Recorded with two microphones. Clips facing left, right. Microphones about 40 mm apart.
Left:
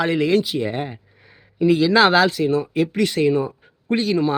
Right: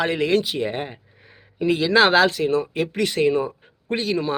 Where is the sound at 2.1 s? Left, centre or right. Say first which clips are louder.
Left 1 dB; right.